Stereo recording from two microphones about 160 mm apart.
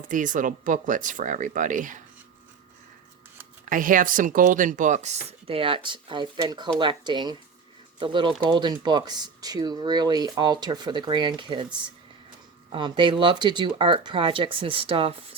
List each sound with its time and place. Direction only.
0.1 s speech: 55° right (ahead or behind)
3.7 s speech: 55° right (ahead or behind); by 11.6 s 30° right (ahead or behind)
12.7 s speech: 30° right (ahead or behind)